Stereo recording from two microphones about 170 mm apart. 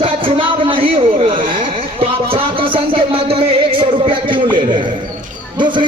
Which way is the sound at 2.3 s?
30° right (ahead or behind).